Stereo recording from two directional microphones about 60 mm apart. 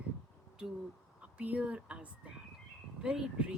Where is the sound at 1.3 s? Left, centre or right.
Right.